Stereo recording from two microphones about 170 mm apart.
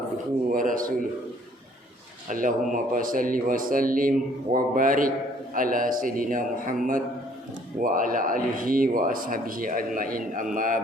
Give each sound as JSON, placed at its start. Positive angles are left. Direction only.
{"t": 0.5, "sound": "speech", "side_deg": -55}
{"t": 2.3, "sound": "speech", "side_deg": -50}